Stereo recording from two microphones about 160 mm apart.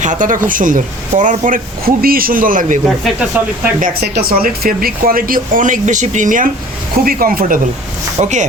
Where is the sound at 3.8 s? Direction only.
55° right (ahead or behind).